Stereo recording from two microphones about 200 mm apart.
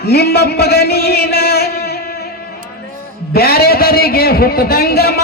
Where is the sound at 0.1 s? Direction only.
55° left (ahead or behind).